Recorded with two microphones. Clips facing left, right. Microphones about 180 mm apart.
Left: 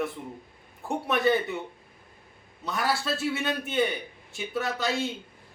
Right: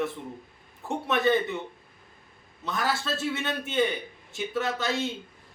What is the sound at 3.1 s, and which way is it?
Speech, 20° right (ahead or behind).